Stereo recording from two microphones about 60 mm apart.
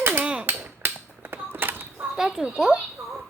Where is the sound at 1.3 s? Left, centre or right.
Right.